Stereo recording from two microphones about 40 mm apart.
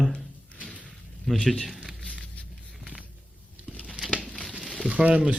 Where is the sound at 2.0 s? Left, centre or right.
Left.